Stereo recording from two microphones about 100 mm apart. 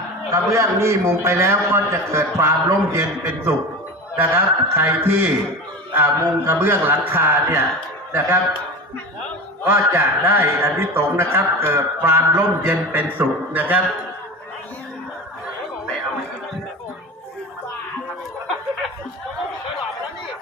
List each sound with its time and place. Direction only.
0.3 s a man's voice: 30° right (ahead or behind)
9.6 s a man's voice: 25° right (ahead or behind)